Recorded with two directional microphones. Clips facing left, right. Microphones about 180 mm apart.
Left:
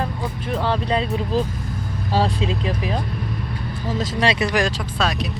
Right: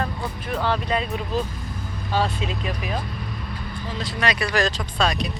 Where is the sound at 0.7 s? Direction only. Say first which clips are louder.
Left 3 dB; 30° left (ahead or behind).